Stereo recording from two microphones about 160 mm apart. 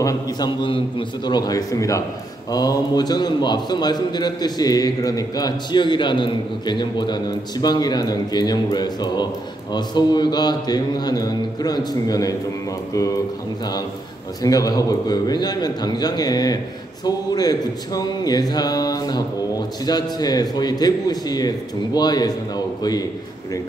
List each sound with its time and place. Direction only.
0.0 s a man's voice: 25° left (ahead or behind)
14.4 s a man's voice: 20° left (ahead or behind)